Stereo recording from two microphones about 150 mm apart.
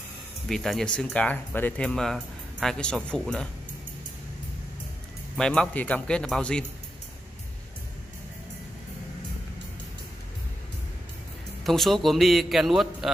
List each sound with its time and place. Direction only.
0.5 s speech: centre (ahead or behind)
5.4 s a man's voice: 5° left (ahead or behind)
11.6 s a man's voice: centre (ahead or behind)